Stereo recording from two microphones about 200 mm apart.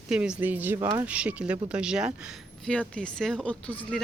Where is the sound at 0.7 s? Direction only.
20° right (ahead or behind).